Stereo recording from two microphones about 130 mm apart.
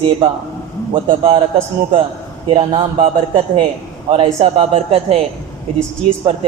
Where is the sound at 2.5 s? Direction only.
45° right (ahead or behind).